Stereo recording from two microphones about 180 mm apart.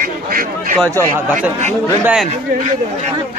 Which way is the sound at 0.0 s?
50° right (ahead or behind).